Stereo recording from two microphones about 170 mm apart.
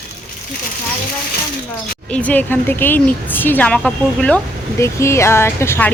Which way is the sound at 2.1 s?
10° left (ahead or behind).